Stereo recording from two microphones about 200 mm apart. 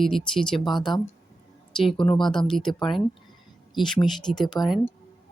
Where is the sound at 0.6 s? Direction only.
20° left (ahead or behind).